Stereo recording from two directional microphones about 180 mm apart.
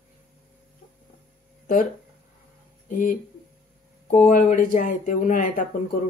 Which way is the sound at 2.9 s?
50° left (ahead or behind).